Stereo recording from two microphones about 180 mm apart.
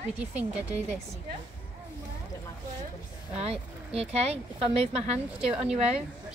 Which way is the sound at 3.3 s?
35° right (ahead or behind).